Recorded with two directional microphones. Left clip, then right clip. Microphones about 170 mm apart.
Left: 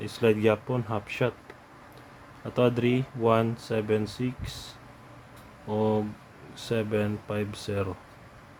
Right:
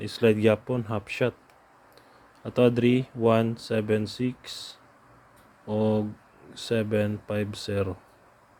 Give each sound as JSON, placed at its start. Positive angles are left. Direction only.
{"t": 0.0, "sound": "speech", "side_deg": -20}
{"t": 2.4, "sound": "speech", "side_deg": -20}